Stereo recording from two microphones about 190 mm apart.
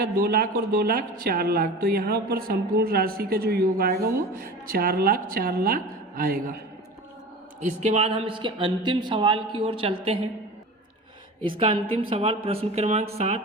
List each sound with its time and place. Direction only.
0.0 s a woman's voice: 50° right (ahead or behind)
7.6 s speech: 35° right (ahead or behind)
11.4 s speech: 25° right (ahead or behind)